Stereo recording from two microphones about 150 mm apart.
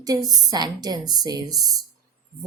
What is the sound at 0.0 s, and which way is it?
Speech, 25° right (ahead or behind).